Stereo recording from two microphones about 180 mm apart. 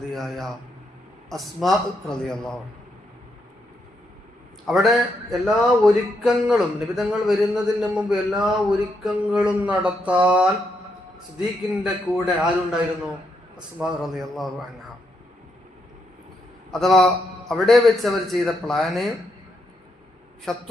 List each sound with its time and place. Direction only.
0.1 s speech: centre (ahead or behind)
4.6 s speech: centre (ahead or behind)
9.0 s a sound: 5° right (ahead or behind)
11.3 s speech: 5° right (ahead or behind)
13.7 s speech: centre (ahead or behind)
16.7 s speech: centre (ahead or behind)
20.5 s speech: 5° left (ahead or behind)